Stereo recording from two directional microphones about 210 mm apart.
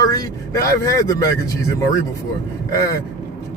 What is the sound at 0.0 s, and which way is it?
Speech, 15° left (ahead or behind).